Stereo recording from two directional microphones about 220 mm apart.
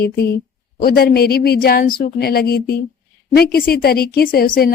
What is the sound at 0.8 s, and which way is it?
A woman's voice, 45° left (ahead or behind).